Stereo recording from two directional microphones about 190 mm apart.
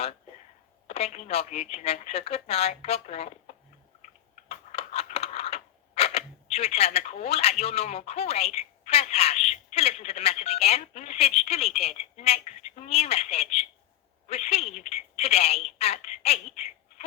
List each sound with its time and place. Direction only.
0.9 s a woman's voice: 35° left (ahead or behind)
4.4 s a sound: 35° left (ahead or behind)
7.6 s a woman's voice: 35° left (ahead or behind)